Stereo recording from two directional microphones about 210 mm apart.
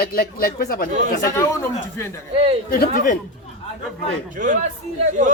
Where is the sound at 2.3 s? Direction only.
30° right (ahead or behind).